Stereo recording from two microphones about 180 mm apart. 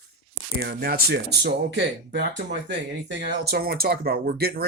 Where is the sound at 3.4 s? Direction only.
60° right (ahead or behind).